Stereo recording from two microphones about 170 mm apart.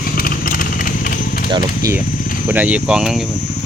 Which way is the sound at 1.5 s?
25° right (ahead or behind).